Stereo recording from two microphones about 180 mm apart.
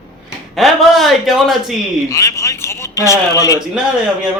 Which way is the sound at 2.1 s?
15° left (ahead or behind).